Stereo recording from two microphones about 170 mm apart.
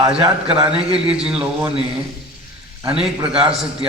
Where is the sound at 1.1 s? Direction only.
5° right (ahead or behind).